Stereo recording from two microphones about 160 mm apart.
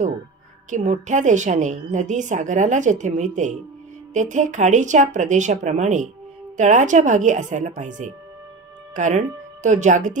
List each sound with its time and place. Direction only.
0.7 s a woman's voice: 50° right (ahead or behind)